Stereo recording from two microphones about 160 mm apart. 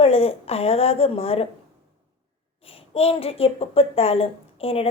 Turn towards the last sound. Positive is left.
turn(degrees=35)  # may be behind; listen again after turning